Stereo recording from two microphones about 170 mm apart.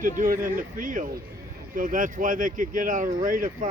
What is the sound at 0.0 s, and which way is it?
Speech, 55° right (ahead or behind).